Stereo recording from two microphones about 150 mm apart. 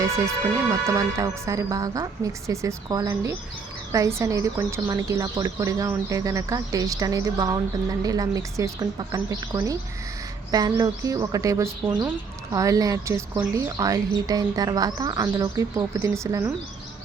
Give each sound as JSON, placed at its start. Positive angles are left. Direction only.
{"t": 0.5, "sound": "speech", "side_deg": -20}
{"t": 10.5, "sound": "speech", "side_deg": -25}